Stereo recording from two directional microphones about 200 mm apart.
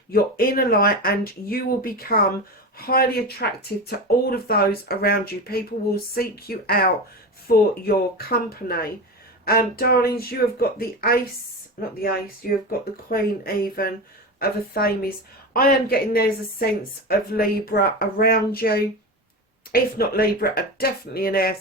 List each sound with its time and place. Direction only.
0.1 s speech: 45° left (ahead or behind)
13.1 s speech: 50° left (ahead or behind)